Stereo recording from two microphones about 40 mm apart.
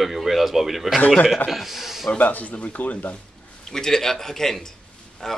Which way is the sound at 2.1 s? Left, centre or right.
Left.